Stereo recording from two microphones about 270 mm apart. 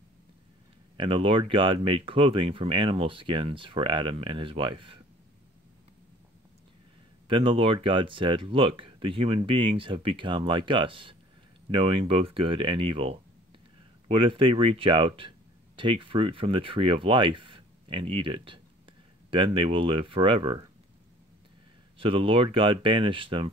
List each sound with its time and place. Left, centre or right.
0.9 s speech: centre
7.2 s speech: centre
21.9 s speech: centre